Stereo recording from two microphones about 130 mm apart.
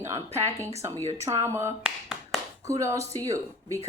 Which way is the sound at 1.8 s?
5° right (ahead or behind).